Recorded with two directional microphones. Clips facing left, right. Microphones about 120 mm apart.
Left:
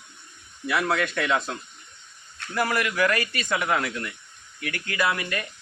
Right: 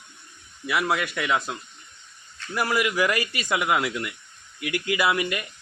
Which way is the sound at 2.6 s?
10° right (ahead or behind).